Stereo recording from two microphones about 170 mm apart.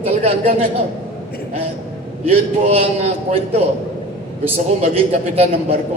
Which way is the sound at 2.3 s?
35° right (ahead or behind).